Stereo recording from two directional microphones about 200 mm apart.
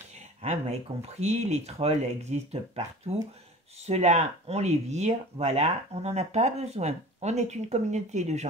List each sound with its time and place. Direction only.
0.4 s speech: 35° right (ahead or behind)